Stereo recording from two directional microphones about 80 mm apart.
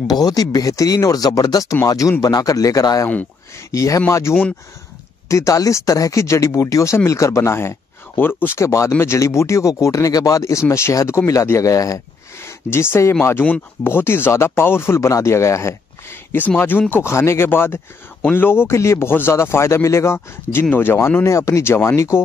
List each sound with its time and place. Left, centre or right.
0.0 s speech: left
8.5 s speech: left
12.4 s speech: left